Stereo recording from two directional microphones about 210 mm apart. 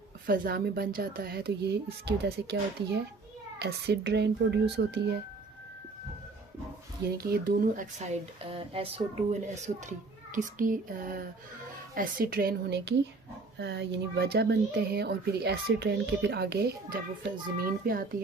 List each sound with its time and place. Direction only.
0.3 s speech: 45° right (ahead or behind)
7.1 s speech: 50° right (ahead or behind)